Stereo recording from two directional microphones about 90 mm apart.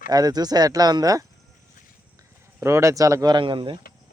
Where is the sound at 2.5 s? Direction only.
30° right (ahead or behind).